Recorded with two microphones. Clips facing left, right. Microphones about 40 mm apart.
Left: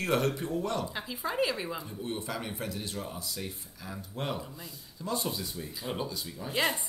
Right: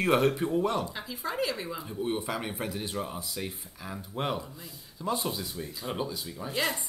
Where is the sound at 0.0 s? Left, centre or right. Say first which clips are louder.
Right 4 dB; centre.